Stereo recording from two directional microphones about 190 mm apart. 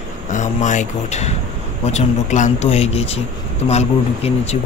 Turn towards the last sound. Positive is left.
turn(degrees=35)  # may be behind; listen again after turning